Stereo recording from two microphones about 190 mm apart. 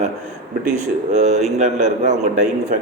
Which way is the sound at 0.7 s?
40° right (ahead or behind).